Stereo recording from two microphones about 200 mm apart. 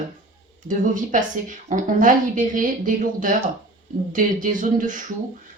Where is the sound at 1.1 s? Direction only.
40° right (ahead or behind).